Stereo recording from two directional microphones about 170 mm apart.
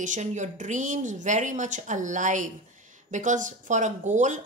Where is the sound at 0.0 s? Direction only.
45° right (ahead or behind).